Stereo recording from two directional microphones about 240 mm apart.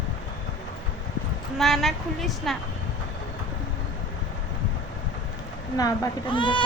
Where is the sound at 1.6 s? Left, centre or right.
Centre.